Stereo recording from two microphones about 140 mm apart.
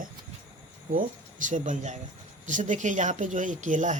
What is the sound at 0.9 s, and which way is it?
Speech, 65° right (ahead or behind).